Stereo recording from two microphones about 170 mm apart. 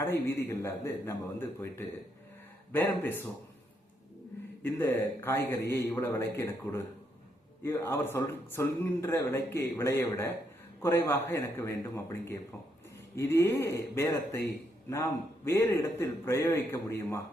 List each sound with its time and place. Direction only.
0.1 s a man's voice: 15° left (ahead or behind)
2.7 s a man's voice: 10° left (ahead or behind)
4.6 s a man's voice: 15° left (ahead or behind)
15.4 s a man's voice: 15° left (ahead or behind)